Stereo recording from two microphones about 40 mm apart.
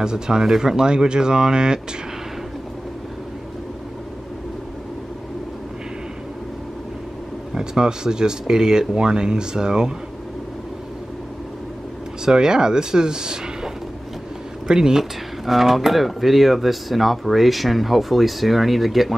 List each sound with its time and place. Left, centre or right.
0.0 s speech: centre
7.5 s speech: centre
12.3 s speech: centre
14.7 s speech: centre